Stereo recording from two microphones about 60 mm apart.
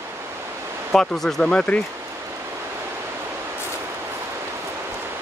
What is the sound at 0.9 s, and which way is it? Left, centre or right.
Speech, centre.